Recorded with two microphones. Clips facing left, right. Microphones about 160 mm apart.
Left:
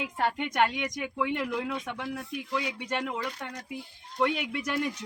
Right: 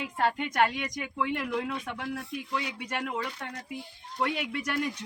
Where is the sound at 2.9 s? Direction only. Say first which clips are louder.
Left 1 dB; 5° right (ahead or behind).